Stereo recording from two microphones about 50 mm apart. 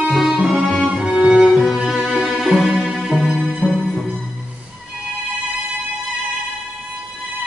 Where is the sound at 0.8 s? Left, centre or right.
Right.